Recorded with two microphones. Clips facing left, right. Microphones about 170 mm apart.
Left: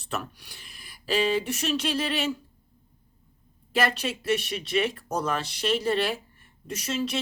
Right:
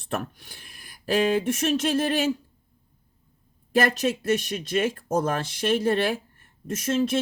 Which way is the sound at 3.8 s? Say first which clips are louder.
Even; 45° right (ahead or behind).